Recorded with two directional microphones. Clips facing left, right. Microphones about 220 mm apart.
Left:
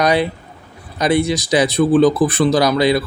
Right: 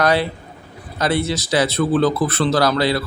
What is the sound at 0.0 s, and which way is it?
Speech, 15° left (ahead or behind).